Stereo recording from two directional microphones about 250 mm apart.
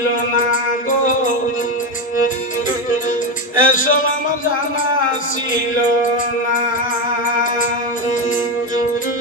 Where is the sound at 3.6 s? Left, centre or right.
Left.